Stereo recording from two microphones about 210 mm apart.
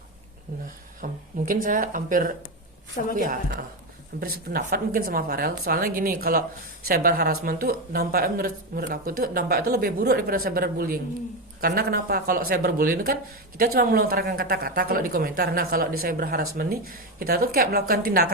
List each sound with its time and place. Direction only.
1.0 s speech: 40° right (ahead or behind)